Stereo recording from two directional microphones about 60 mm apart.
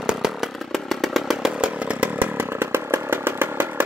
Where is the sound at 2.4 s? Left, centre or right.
Right.